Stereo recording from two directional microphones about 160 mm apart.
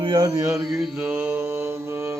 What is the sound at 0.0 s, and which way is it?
Mantra, 30° right (ahead or behind).